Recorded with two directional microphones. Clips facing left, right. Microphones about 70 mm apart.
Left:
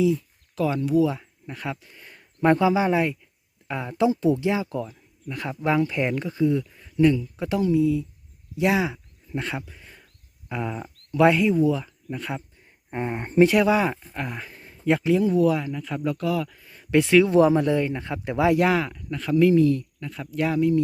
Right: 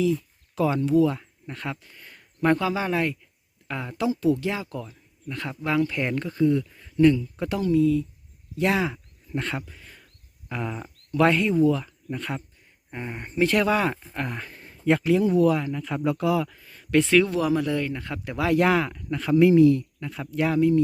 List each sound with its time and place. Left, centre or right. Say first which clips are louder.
0.5 s speech: right 1 dB; centre
3.9 s speech: left 2 dB; left
8.5 s a sound: left 1 dB; centre
10.5 s speech: left 2 dB; centre
12.9 s speech: left 7 dB; left
13.4 s speech: left 3 dB; centre
16.5 s speech: left 1 dB; centre
17.3 s speech: left 6 dB; left
18.5 s speech: even; centre